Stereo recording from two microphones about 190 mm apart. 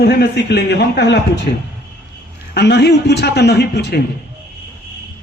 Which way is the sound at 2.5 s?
65° left (ahead or behind).